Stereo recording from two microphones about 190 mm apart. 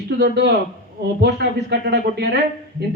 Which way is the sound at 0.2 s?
60° right (ahead or behind).